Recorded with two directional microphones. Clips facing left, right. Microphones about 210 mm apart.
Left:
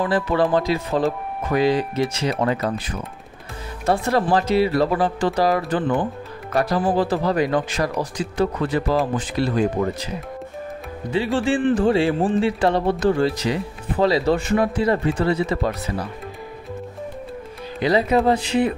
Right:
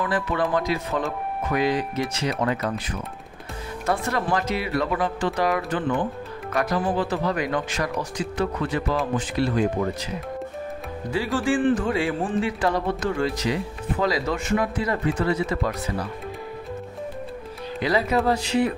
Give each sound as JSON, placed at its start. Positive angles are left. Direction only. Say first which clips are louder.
{"t": 0.0, "sound": "speech", "louder": "left 5 dB", "side_deg": 35}
{"t": 3.8, "sound": "speech", "louder": "left 5 dB", "side_deg": 30}
{"t": 11.1, "sound": "speech", "louder": "left 3 dB", "side_deg": 20}
{"t": 17.8, "sound": "speech", "louder": "left 4 dB", "side_deg": 25}